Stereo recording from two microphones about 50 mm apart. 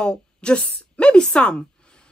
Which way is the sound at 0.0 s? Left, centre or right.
Centre.